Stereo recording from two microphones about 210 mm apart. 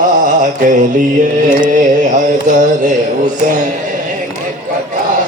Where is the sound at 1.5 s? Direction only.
40° right (ahead or behind).